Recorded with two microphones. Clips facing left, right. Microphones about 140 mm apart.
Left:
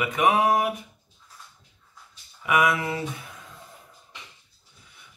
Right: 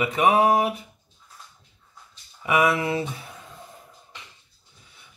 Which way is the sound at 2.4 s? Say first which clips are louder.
Right 2 dB; 30° right (ahead or behind).